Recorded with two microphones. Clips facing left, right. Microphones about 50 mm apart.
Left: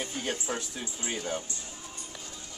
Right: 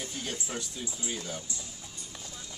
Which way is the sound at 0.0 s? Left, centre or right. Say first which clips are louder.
Left 4 dB; left.